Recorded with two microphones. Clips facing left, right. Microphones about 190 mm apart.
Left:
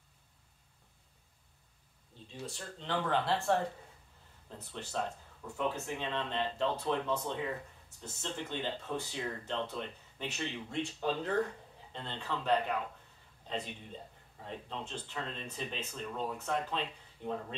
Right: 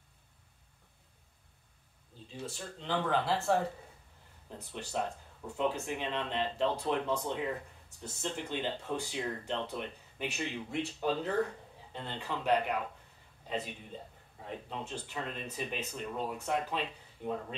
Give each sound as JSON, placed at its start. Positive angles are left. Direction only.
{"t": 2.2, "sound": "speech", "side_deg": 0}
{"t": 4.5, "sound": "speech", "side_deg": -15}
{"t": 14.4, "sound": "speech", "side_deg": -10}